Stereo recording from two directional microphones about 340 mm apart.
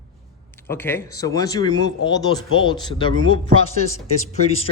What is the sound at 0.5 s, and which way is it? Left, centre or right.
Speech, centre.